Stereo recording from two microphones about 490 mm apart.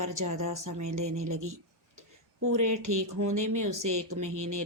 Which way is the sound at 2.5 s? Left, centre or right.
Right.